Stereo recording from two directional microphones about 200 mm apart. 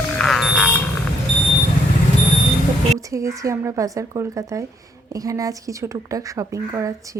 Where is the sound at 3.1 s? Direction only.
15° right (ahead or behind).